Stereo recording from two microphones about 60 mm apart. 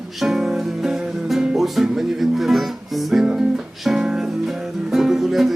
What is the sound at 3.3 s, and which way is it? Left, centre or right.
Music, centre.